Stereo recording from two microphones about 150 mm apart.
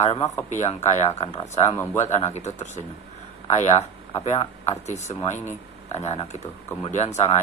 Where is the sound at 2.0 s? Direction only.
50° left (ahead or behind).